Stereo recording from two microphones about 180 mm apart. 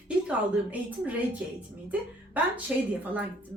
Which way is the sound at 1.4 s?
10° right (ahead or behind).